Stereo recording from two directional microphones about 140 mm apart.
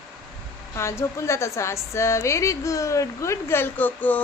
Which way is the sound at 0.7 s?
20° left (ahead or behind).